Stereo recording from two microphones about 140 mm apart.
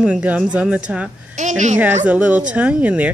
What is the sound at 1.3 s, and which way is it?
Speech, 60° right (ahead or behind).